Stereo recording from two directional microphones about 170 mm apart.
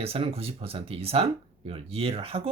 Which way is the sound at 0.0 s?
35° right (ahead or behind).